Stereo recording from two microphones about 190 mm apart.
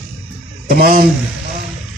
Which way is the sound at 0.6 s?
55° right (ahead or behind).